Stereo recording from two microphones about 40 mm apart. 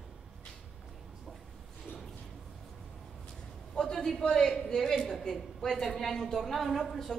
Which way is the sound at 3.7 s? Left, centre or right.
Centre.